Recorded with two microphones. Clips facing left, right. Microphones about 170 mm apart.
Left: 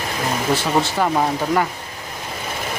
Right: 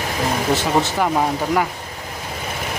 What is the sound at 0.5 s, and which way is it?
Speech, 20° right (ahead or behind).